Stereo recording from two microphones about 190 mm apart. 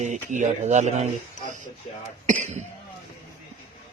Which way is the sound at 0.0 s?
40° right (ahead or behind).